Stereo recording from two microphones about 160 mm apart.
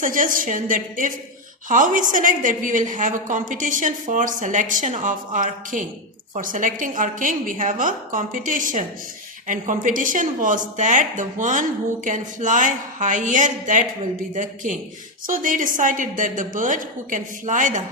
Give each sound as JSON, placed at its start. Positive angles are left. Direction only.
{"t": 0.0, "sound": "a woman's voice", "side_deg": -55}